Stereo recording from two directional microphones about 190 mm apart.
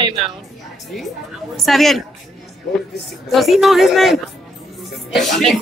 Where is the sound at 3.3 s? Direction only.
Centre (ahead or behind).